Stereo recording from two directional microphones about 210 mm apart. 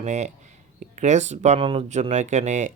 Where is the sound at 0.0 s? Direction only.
35° right (ahead or behind).